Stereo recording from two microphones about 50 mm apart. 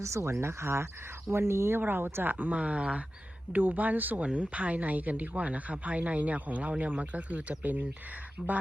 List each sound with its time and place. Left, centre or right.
0.0 s speech: right
1.8 s speech: right